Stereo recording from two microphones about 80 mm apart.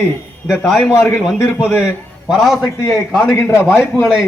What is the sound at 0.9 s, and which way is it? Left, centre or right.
Speech, left.